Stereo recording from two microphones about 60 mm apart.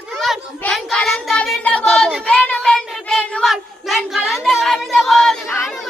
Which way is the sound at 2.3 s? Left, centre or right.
Centre.